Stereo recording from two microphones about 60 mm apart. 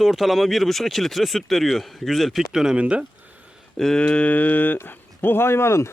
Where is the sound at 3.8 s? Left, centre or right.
Centre.